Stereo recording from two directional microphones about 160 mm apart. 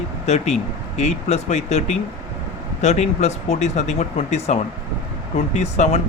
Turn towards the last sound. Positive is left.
turn(degrees=45)  # may be behind; listen again after turning